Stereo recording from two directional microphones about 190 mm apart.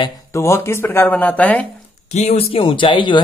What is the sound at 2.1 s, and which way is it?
Speech, 35° left (ahead or behind).